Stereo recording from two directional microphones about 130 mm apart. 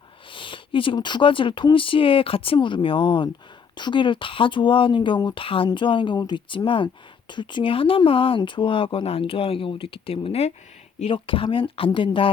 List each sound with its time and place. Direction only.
0.3 s speech: 40° left (ahead or behind)